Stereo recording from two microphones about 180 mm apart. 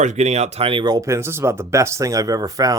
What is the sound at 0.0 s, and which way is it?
Speech, 40° right (ahead or behind).